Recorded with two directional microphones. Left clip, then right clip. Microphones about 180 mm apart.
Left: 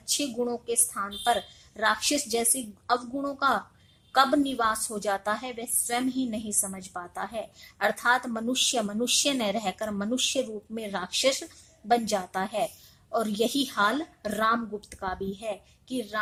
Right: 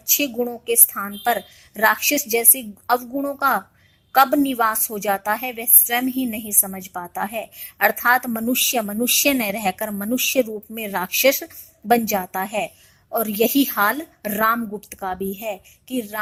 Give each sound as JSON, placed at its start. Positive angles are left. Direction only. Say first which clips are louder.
{"t": 0.2, "sound": "a woman's voice", "louder": "right 6 dB", "side_deg": -30}